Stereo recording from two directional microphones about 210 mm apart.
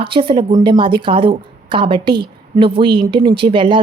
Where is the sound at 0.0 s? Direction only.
25° right (ahead or behind).